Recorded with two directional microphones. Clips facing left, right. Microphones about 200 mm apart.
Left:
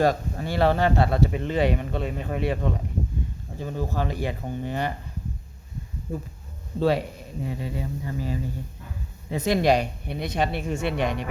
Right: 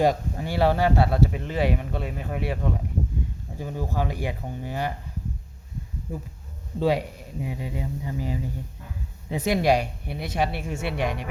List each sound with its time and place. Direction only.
0.0 s speech: 15° right (ahead or behind)
6.1 s speech: 15° right (ahead or behind)